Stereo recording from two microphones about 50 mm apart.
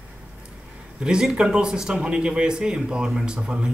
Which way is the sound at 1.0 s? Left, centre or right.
Centre.